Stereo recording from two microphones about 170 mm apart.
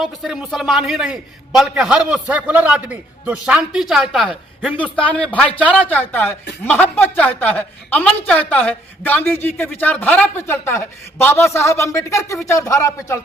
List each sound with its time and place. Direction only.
0.0 s a man's voice: 5° right (ahead or behind); by 13.1 s 15° left (ahead or behind)